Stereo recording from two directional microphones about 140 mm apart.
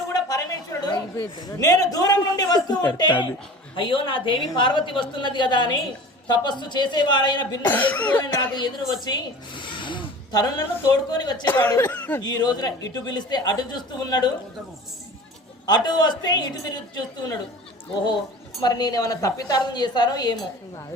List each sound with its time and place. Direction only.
0.1 s a man's voice: 25° left (ahead or behind)
7.6 s speech: 10° left (ahead or behind)
8.5 s a woman's voice: 30° left (ahead or behind)
9.6 s a sound: 35° left (ahead or behind)
11.1 s a woman's voice: 30° left (ahead or behind)
11.4 s speech: 15° left (ahead or behind)
12.2 s a woman's voice: 30° left (ahead or behind)
15.6 s a woman's voice: 30° left (ahead or behind)
18.6 s a woman's voice: 30° left (ahead or behind)